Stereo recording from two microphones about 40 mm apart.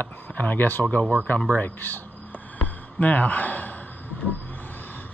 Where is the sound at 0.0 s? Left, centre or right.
Left.